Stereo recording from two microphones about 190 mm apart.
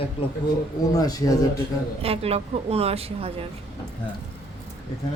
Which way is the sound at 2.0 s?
30° right (ahead or behind).